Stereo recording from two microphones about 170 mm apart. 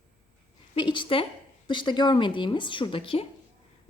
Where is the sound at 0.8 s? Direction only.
30° left (ahead or behind).